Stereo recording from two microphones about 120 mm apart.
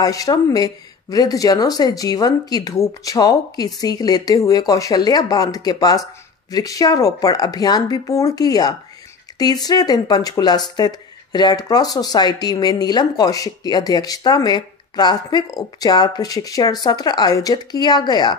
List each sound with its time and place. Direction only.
0.0 s speech: 30° left (ahead or behind)